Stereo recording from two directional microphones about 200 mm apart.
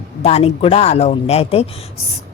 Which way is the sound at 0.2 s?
30° left (ahead or behind).